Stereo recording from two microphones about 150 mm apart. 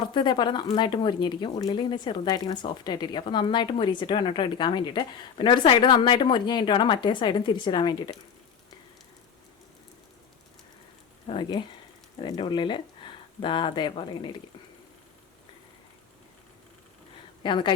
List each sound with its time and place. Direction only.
0.0 s speech: 30° left (ahead or behind)
11.3 s speech: 30° left (ahead or behind)
17.4 s a woman's voice: 30° left (ahead or behind)